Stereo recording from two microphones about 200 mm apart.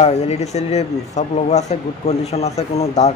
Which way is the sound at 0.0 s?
35° left (ahead or behind).